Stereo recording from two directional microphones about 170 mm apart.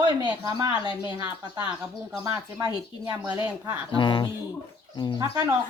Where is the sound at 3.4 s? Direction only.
20° right (ahead or behind).